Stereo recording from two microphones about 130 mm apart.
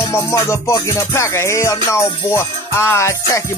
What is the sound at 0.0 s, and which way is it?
Music, 20° left (ahead or behind).